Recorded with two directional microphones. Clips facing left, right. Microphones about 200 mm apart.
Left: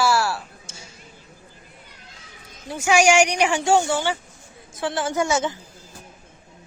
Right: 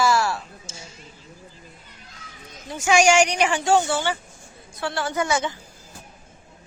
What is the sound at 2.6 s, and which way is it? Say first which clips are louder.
A woman's voice: even; 10° left (ahead or behind).